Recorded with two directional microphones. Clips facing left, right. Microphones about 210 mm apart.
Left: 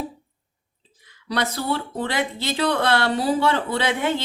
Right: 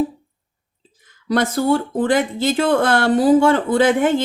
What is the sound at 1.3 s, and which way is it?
Speech, 50° right (ahead or behind).